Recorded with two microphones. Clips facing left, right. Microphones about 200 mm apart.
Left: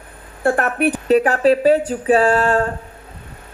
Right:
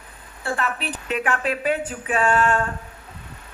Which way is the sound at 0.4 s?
55° left (ahead or behind).